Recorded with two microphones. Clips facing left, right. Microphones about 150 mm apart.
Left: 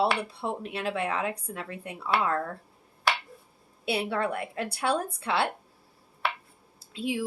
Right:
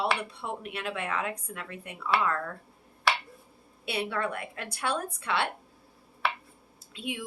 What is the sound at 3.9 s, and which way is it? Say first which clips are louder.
Speech: left 3 dB; 30° left (ahead or behind).